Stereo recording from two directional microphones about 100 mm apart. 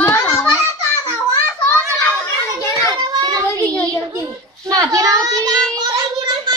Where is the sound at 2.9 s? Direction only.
40° right (ahead or behind).